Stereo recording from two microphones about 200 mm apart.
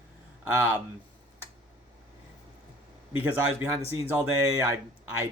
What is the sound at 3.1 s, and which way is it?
Speech, 10° right (ahead or behind).